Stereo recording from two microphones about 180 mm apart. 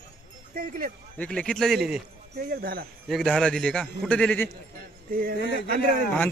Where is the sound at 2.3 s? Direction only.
55° right (ahead or behind).